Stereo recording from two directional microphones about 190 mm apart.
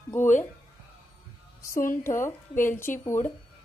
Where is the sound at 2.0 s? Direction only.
15° left (ahead or behind).